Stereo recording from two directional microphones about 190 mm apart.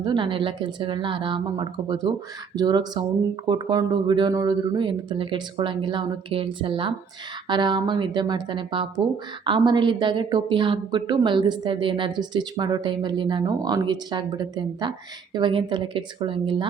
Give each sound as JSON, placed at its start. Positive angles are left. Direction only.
{"t": 0.0, "sound": "a woman's voice", "side_deg": -25}